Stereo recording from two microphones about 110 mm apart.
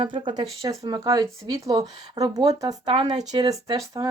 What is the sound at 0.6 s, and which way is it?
Speech, 35° right (ahead or behind).